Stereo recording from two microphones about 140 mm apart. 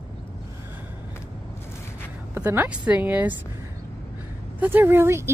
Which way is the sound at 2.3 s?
15° right (ahead or behind).